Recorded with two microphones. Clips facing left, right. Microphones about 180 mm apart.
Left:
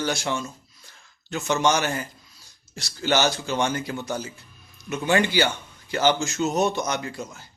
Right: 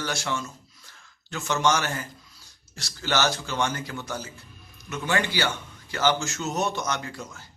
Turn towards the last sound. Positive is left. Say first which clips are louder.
# left 3 dB
turn(degrees=20)  # may be behind; listen again after turning